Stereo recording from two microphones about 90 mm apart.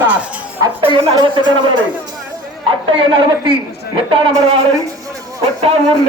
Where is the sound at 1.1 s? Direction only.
60° right (ahead or behind).